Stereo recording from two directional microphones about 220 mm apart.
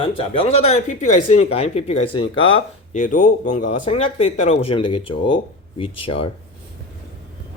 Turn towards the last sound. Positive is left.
turn(degrees=25)  # may be behind; listen again after turning